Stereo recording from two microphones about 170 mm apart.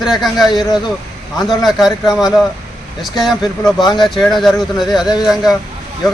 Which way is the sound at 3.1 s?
Centre (ahead or behind).